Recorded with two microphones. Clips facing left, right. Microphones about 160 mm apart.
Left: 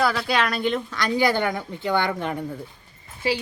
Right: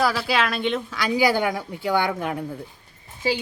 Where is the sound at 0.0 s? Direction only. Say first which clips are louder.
Even; 5° right (ahead or behind).